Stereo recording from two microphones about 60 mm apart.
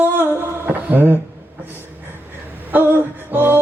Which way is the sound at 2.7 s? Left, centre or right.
Right.